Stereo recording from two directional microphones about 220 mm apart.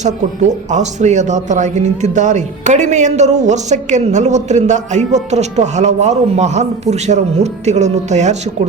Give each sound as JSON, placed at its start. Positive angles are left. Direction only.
{"t": 0.0, "sound": "speech", "side_deg": -30}